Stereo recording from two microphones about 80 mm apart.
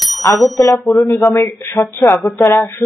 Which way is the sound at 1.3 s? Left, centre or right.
Left.